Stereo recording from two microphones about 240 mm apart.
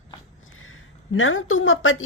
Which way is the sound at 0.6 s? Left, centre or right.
Left.